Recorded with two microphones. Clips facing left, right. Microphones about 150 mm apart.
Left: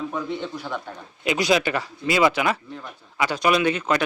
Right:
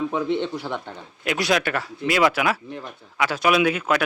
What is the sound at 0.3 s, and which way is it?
Speech, 70° right (ahead or behind).